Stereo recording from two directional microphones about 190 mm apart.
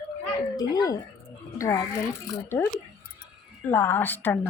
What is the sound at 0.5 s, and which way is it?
Speech, 20° left (ahead or behind).